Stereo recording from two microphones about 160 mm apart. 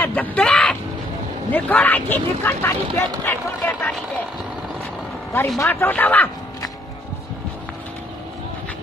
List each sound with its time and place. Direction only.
0.0 s a sound: 10° left (ahead or behind)
1.5 s speech: 10° left (ahead or behind)
5.6 s speech: 15° left (ahead or behind)